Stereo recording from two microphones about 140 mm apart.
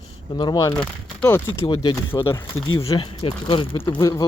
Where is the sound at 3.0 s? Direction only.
35° left (ahead or behind).